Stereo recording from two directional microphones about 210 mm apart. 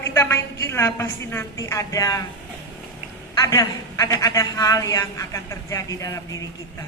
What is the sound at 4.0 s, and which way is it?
A man's voice, 15° left (ahead or behind).